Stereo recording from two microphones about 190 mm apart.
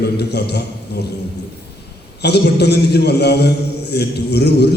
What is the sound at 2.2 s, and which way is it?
A man's voice, 60° left (ahead or behind).